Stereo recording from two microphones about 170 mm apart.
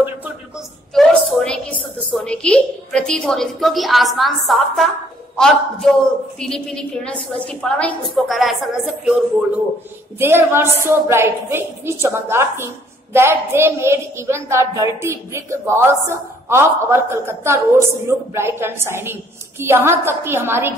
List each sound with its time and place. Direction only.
0.9 s a woman's voice: 5° left (ahead or behind); by 20.7 s 15° right (ahead or behind)